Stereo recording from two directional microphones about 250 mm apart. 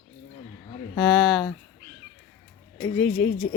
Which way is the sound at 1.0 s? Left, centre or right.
Centre.